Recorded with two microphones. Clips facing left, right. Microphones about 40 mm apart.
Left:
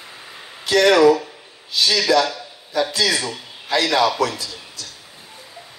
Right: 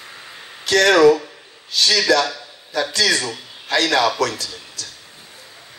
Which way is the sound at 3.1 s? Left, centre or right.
Left.